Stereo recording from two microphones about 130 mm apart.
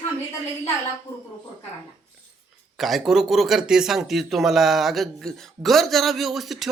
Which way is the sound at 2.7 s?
Centre (ahead or behind).